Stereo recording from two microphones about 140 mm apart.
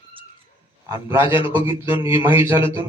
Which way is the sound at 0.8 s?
20° right (ahead or behind).